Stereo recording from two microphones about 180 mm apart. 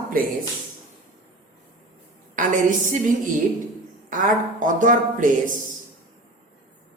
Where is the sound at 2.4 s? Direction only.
45° right (ahead or behind).